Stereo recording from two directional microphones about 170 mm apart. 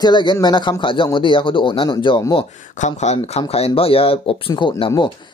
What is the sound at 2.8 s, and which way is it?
Speech, 40° left (ahead or behind).